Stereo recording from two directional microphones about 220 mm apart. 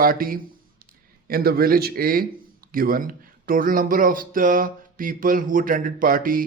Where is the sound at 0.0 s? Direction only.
40° right (ahead or behind).